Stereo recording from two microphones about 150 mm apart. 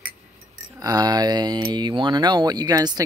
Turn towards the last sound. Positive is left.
turn(degrees=-25)  # may be behind; listen again after turning